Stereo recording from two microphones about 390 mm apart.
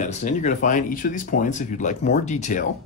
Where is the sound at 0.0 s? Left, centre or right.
Centre.